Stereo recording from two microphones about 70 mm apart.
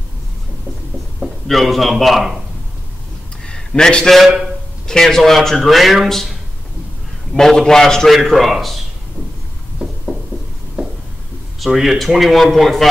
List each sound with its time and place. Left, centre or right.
1.2 s speech: centre
3.4 s a man's voice: centre
7.3 s a man's voice: centre
9.8 s a sound: centre
11.6 s a man's voice: centre